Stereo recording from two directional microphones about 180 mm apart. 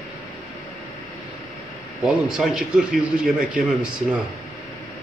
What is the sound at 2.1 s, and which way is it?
A man's voice, 5° right (ahead or behind).